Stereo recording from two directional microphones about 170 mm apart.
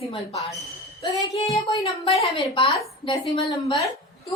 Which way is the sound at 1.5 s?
30° left (ahead or behind).